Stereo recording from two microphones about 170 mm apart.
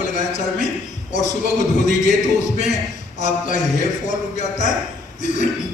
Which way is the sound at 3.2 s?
45° left (ahead or behind).